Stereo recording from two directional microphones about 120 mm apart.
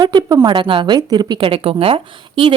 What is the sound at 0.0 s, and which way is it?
A woman's voice, 35° right (ahead or behind).